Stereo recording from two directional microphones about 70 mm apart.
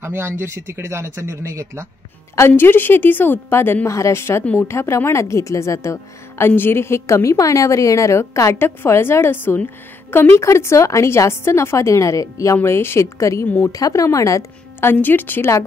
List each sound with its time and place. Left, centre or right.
0.0 s speech: right
2.3 s a woman's voice: left
8.5 s a woman's voice: left
12.6 s a woman's voice: left
13.7 s a woman's voice: left
14.8 s speech: left